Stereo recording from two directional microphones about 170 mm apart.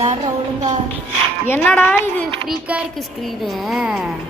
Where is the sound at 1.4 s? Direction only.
10° left (ahead or behind).